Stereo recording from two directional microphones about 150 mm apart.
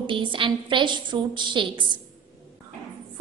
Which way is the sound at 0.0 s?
35° right (ahead or behind).